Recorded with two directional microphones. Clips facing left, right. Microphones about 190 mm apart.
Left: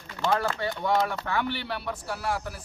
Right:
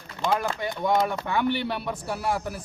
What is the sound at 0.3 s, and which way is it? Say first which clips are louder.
A man's voice: even; 15° right (ahead or behind).